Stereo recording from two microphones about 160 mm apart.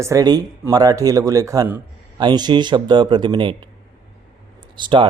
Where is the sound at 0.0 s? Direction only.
20° right (ahead or behind).